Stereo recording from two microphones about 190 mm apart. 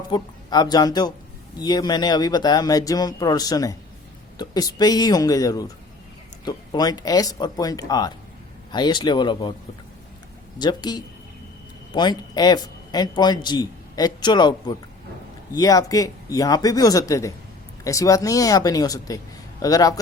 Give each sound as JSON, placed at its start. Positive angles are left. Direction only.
{"t": 0.1, "sound": "a man's voice", "side_deg": 20}
{"t": 10.6, "sound": "a man's voice", "side_deg": 20}